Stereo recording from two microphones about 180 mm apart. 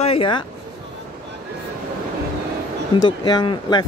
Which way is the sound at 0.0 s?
30° left (ahead or behind).